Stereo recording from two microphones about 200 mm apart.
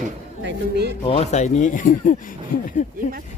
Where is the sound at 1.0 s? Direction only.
30° left (ahead or behind).